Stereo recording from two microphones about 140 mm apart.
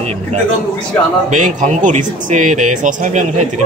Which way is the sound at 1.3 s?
65° right (ahead or behind).